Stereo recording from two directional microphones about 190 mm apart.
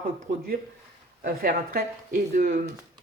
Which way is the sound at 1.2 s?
50° right (ahead or behind).